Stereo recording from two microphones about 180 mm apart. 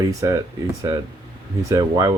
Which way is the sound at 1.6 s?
20° right (ahead or behind).